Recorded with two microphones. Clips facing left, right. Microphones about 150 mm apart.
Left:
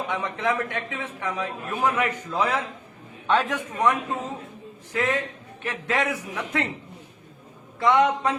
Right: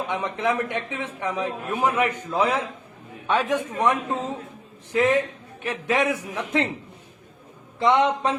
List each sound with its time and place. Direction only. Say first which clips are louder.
0.1 s a man's voice: right 1 dB; 20° right (ahead or behind)
7.8 s a man's voice: even; 20° right (ahead or behind)